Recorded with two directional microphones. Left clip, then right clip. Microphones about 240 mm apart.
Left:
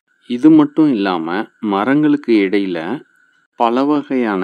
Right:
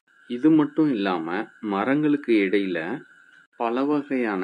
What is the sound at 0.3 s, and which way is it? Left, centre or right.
Speech, left.